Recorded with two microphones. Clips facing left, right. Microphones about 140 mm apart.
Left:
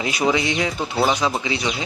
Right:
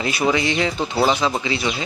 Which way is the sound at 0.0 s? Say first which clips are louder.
Right 1 dB; 15° left (ahead or behind).